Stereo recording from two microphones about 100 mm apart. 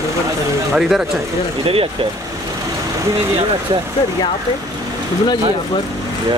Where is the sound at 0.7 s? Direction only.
5° right (ahead or behind).